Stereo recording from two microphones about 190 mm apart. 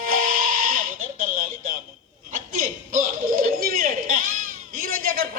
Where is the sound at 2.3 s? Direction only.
45° right (ahead or behind).